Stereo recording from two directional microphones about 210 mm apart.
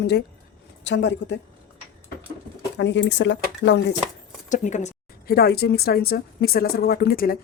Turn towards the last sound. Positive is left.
turn(degrees=45)  # may be behind; listen again after turning